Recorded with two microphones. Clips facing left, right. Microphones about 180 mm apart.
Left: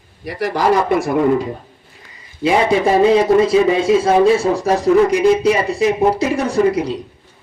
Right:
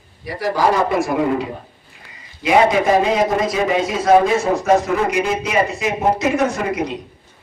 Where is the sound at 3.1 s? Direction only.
30° left (ahead or behind).